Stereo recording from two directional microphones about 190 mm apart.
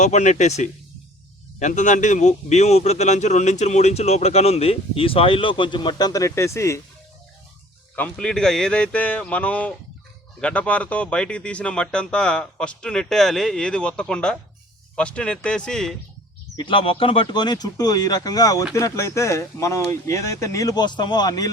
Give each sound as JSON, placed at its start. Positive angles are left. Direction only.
{"t": 0.0, "sound": "a man's voice", "side_deg": 40}
{"t": 7.9, "sound": "speech", "side_deg": 5}
{"t": 16.6, "sound": "speech", "side_deg": 25}